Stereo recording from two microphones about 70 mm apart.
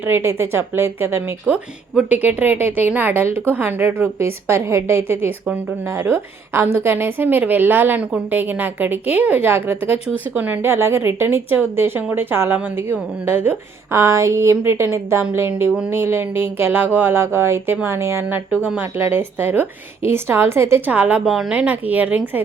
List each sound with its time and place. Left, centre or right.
0.0 s a woman's voice: right
1.5 s a woman's voice: right
18.3 s a woman's voice: right
20.8 s a woman's voice: centre
21.2 s a woman's voice: centre
21.5 s a woman's voice: centre